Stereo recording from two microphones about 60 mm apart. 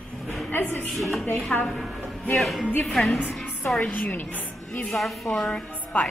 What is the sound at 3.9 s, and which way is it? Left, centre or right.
Speech, left.